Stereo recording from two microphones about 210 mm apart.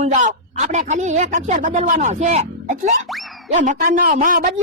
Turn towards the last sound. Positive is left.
turn(degrees=-40)  # may be behind; listen again after turning